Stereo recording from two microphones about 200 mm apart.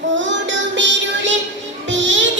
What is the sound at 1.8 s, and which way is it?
Music, 65° right (ahead or behind).